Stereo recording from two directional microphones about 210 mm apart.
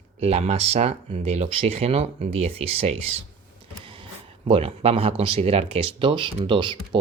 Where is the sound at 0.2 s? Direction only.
30° right (ahead or behind).